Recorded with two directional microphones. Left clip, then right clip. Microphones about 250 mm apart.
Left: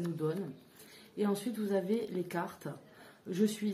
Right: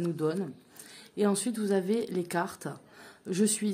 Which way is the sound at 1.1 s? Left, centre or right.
Right.